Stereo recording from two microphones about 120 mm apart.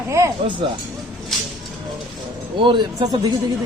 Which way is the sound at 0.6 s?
45° right (ahead or behind).